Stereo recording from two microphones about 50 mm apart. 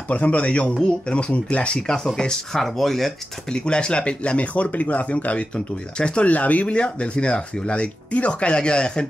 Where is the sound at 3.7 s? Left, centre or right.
Centre.